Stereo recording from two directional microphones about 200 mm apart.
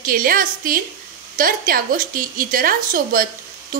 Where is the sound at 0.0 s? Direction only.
45° right (ahead or behind).